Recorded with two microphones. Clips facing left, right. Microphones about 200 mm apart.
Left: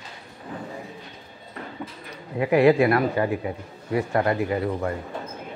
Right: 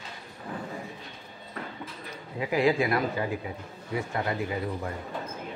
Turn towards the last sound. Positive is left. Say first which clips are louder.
# left 7 dB
turn(degrees=65)  # may be behind; listen again after turning